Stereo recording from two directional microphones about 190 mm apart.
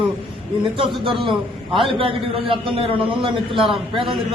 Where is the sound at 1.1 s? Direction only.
25° right (ahead or behind).